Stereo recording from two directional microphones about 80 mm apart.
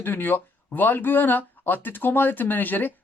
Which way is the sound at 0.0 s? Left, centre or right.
Left.